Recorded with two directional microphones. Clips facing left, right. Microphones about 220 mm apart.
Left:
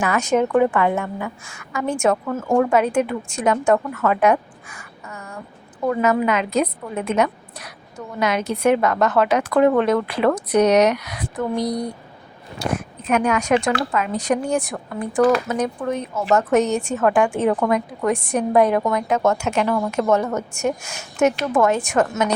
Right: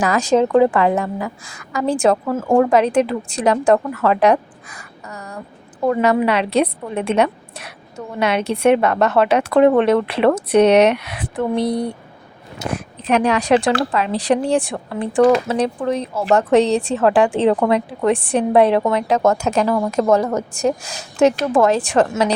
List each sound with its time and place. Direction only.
0.0 s a woman's voice: 35° right (ahead or behind)